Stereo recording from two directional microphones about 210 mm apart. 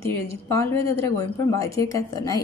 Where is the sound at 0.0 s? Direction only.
15° left (ahead or behind).